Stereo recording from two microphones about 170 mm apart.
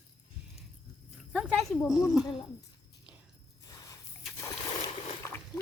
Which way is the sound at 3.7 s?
20° left (ahead or behind).